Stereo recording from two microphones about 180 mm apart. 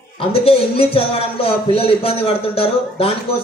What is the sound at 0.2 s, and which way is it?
A man's voice, 30° left (ahead or behind).